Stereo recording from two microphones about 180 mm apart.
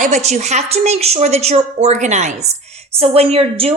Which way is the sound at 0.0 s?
40° right (ahead or behind).